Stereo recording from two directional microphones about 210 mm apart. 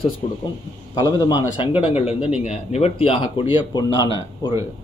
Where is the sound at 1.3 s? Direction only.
20° left (ahead or behind).